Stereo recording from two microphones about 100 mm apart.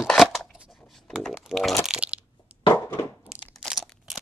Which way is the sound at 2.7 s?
25° left (ahead or behind).